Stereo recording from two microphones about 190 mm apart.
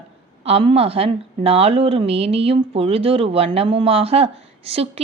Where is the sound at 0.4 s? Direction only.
30° right (ahead or behind).